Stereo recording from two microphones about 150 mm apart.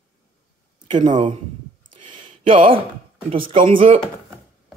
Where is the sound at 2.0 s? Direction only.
35° right (ahead or behind).